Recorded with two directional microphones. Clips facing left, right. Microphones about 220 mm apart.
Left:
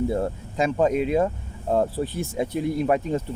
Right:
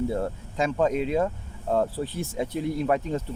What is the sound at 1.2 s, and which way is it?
Speech, 20° left (ahead or behind).